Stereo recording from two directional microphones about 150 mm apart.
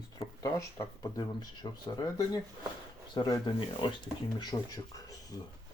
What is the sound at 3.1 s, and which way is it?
Speech, 25° left (ahead or behind).